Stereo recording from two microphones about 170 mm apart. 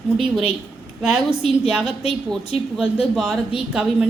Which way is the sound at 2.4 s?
35° left (ahead or behind).